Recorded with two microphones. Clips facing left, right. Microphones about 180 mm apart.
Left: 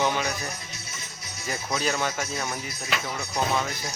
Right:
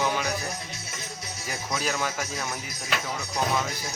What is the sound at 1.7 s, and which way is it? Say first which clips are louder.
Speech: left 2 dB; 5° right (ahead or behind).